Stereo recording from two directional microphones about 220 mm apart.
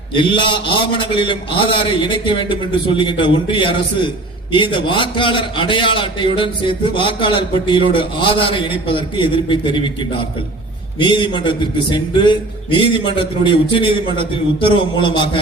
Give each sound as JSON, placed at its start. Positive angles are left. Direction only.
{"t": 0.1, "sound": "a man's voice", "side_deg": 20}
{"t": 11.0, "sound": "a man's voice", "side_deg": 20}